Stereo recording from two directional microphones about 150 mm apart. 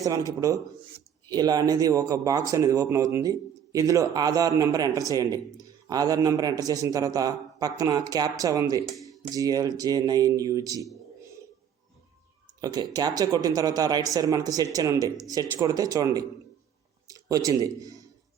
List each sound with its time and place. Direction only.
0.0 s speech: 25° right (ahead or behind)
12.5 s speech: 25° right (ahead or behind)